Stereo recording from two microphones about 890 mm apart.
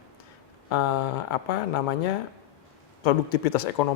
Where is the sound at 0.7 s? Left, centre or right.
Left.